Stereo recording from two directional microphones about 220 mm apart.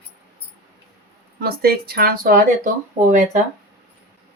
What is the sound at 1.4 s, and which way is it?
Speech, 45° right (ahead or behind).